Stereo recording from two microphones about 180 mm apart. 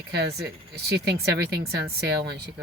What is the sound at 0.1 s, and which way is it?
Speech, 65° right (ahead or behind).